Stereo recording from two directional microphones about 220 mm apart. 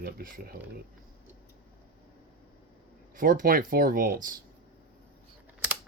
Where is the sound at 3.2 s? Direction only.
40° right (ahead or behind).